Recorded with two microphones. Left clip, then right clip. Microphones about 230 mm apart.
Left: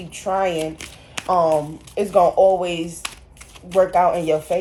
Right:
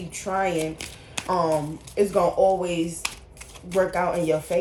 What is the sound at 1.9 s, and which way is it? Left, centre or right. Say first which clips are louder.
Speech: left 5 dB; left.